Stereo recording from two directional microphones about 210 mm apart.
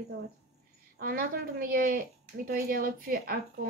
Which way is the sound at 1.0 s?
45° right (ahead or behind).